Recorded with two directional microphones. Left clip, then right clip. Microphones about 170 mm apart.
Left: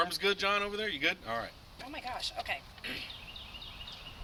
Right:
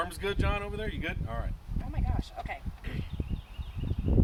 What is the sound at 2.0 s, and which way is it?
Speech, 15° left (ahead or behind).